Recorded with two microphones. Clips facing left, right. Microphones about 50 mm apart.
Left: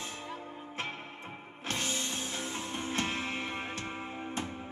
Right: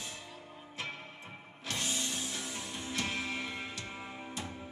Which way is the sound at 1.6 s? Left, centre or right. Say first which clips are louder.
Left 2 dB; left.